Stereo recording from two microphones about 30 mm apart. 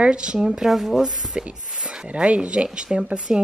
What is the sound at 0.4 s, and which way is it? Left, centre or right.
Speech, centre.